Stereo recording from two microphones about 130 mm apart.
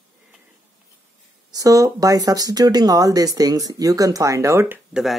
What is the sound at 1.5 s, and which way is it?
Speech, 25° right (ahead or behind).